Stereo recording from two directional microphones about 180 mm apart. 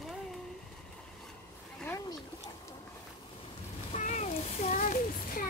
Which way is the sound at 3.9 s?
40° left (ahead or behind).